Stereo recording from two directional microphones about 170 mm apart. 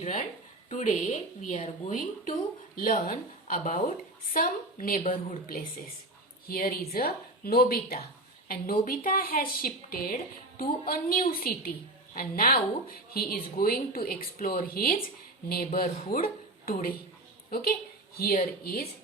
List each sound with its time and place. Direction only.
0.7 s a woman's voice: 45° left (ahead or behind)
6.5 s a woman's voice: 60° left (ahead or behind)